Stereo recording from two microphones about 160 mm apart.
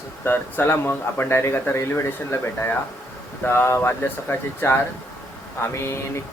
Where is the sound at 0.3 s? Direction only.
15° left (ahead or behind).